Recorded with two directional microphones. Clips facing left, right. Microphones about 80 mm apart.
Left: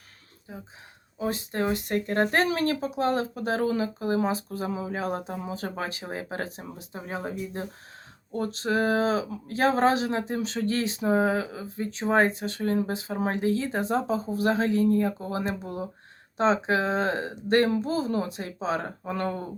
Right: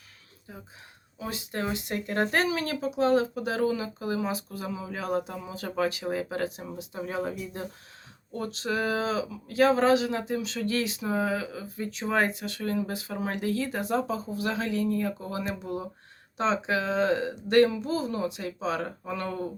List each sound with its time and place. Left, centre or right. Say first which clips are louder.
0.5 s speech: left 3 dB; left
1.2 s speech: left 5 dB; left